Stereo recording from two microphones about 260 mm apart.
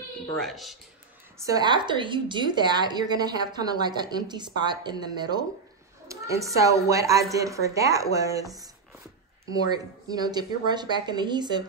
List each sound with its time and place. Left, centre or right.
0.4 s speech: centre
1.4 s a woman's voice: centre